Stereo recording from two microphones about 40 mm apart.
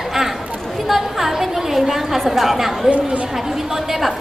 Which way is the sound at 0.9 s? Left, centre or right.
Centre.